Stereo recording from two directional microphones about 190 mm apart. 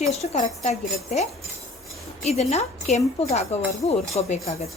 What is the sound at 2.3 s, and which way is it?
Speech, 35° left (ahead or behind).